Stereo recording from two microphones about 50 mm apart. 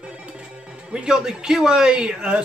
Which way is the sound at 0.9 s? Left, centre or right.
Centre.